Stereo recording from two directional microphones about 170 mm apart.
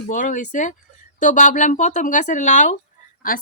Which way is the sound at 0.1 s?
50° left (ahead or behind).